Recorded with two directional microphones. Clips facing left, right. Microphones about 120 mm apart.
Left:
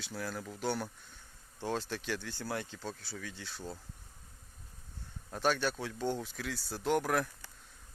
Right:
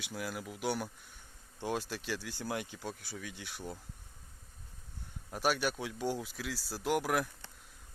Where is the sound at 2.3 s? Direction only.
15° right (ahead or behind).